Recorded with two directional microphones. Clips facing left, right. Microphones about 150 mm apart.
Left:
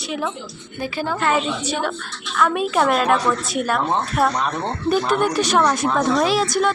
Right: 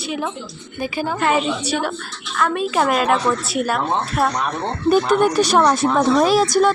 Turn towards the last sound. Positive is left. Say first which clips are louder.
# right 4 dB
turn(degrees=-40)  # may be behind; listen again after turning